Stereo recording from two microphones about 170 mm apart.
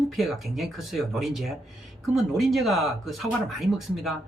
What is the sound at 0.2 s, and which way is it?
Speech, centre (ahead or behind).